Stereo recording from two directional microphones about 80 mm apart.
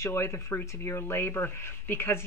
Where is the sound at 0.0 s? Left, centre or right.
Left.